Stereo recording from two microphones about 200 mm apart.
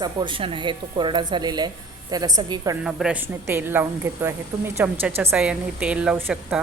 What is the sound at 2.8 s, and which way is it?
A woman's voice, 5° right (ahead or behind).